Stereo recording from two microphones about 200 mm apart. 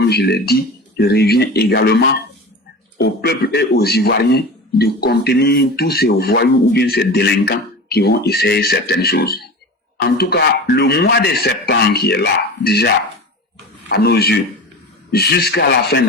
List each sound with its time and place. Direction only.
0.0 s a man's voice: 55° left (ahead or behind)